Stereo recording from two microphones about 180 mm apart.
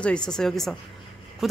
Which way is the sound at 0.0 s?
5° left (ahead or behind).